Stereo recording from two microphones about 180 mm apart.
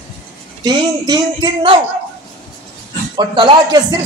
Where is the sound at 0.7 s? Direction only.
25° right (ahead or behind).